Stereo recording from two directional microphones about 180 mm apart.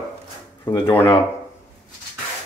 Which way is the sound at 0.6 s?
15° left (ahead or behind).